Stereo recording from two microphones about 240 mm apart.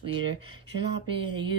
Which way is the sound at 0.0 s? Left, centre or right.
Right.